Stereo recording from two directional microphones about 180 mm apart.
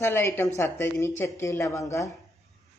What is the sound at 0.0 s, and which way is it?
Speech, 15° left (ahead or behind).